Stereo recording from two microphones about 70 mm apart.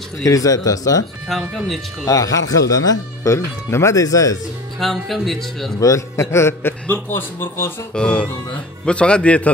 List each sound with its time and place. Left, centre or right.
0.2 s speech: left
1.5 s speech: centre
2.0 s speech: left
4.7 s speech: centre
5.8 s a man's voice: left
7.9 s speech: centre